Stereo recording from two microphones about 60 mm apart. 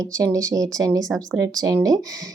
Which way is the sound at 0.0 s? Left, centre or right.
Right.